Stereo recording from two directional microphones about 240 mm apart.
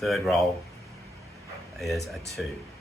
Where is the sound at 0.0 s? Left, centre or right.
Centre.